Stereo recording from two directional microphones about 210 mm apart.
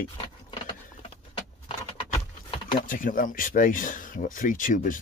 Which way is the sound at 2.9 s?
40° left (ahead or behind).